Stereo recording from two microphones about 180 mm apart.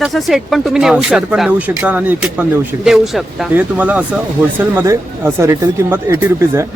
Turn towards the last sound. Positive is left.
turn(degrees=-15)  # may be behind; listen again after turning